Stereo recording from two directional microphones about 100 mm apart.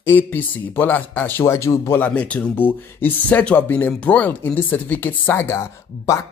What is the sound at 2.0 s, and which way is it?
Speech, 15° left (ahead or behind).